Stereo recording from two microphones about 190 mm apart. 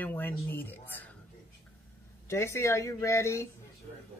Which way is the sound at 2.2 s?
15° left (ahead or behind).